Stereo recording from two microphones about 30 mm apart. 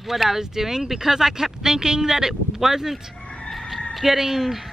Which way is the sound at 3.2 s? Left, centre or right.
Left.